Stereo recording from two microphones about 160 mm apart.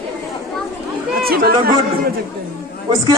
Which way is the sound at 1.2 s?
70° right (ahead or behind).